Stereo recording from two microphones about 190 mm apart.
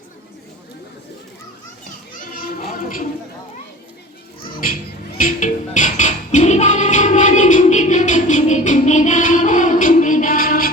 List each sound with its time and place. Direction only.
2.2 s music: 50° left (ahead or behind)
4.6 s music: 45° left (ahead or behind)